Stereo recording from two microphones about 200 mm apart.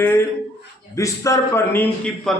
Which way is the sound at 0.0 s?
10° left (ahead or behind).